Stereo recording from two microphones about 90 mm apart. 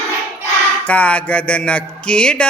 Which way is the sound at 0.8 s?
15° left (ahead or behind).